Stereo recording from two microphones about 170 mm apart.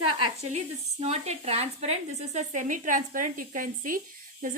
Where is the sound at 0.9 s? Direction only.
35° right (ahead or behind); by 4.4 s 55° right (ahead or behind).